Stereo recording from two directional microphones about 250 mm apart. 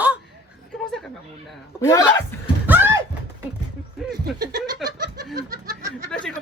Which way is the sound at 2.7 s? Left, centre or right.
Centre.